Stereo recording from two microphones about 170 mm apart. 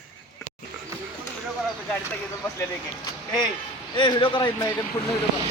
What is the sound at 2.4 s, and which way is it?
Speech, 10° left (ahead or behind).